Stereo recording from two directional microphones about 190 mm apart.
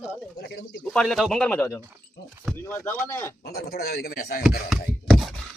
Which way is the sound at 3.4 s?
55° left (ahead or behind).